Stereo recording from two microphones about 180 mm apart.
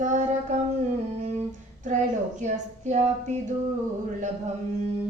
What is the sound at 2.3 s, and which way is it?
Speech, 40° right (ahead or behind).